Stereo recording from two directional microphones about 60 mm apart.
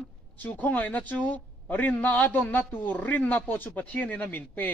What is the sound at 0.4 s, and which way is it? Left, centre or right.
A man's voice, left.